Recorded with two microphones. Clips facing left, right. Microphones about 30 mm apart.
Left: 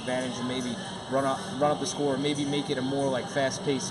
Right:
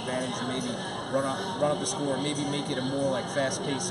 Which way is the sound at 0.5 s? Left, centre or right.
Centre.